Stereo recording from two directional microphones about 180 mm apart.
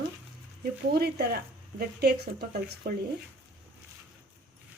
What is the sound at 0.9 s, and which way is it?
Speech, 60° right (ahead or behind).